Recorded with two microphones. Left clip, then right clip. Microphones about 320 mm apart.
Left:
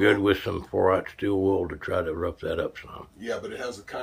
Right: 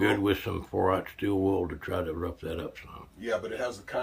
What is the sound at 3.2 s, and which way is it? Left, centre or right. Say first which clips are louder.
Speech: right 1 dB; centre.